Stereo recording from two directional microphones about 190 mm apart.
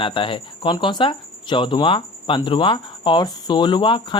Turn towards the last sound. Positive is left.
turn(degrees=25)  # may be behind; listen again after turning